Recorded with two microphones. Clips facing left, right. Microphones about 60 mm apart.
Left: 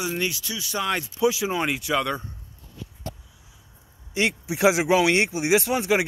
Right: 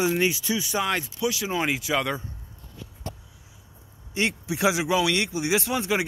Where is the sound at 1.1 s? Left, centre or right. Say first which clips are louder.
Left 5 dB; left.